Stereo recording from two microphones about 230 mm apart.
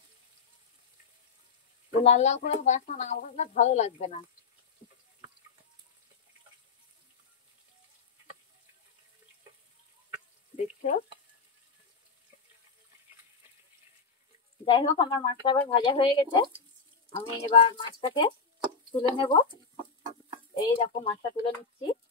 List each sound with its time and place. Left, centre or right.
1.9 s speech: left
10.5 s frying: left
14.6 s speech: left
17.5 s speech: left
20.5 s speech: left